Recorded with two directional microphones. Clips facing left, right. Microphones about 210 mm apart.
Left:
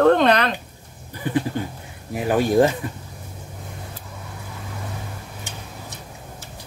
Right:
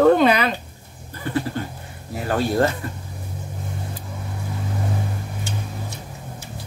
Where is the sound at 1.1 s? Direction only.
15° left (ahead or behind).